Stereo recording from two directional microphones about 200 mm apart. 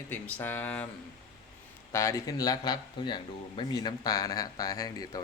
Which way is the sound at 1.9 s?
15° left (ahead or behind).